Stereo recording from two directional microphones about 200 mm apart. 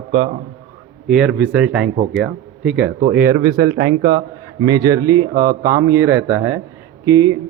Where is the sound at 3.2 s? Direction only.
50° right (ahead or behind).